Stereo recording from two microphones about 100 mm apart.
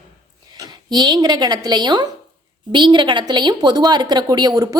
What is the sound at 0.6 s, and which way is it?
A woman's voice, 45° right (ahead or behind).